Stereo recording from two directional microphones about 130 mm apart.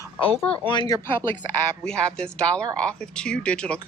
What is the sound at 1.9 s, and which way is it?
Speech, 5° left (ahead or behind).